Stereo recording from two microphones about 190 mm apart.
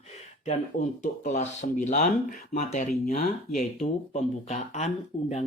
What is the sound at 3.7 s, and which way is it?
Speech, 35° left (ahead or behind).